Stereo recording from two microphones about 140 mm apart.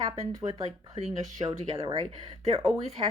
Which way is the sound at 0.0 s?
25° right (ahead or behind).